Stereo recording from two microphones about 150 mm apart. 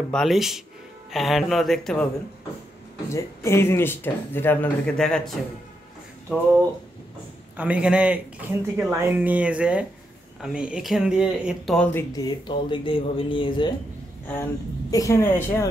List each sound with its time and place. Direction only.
0.1 s speech: centre (ahead or behind)
3.1 s speech: 20° left (ahead or behind); by 5.4 s 5° left (ahead or behind)
7.5 s a man's voice: 10° right (ahead or behind)
11.9 s speech: 25° left (ahead or behind)
14.2 s speech: 15° left (ahead or behind)